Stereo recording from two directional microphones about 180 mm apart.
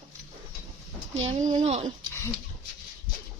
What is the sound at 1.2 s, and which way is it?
Speech, 40° right (ahead or behind).